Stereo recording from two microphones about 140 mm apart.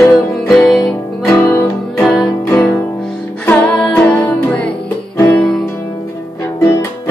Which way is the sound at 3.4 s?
10° left (ahead or behind).